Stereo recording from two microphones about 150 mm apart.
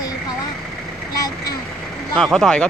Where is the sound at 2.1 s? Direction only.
5° left (ahead or behind).